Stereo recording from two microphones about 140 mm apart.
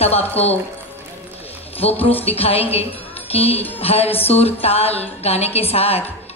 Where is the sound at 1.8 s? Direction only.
45° left (ahead or behind).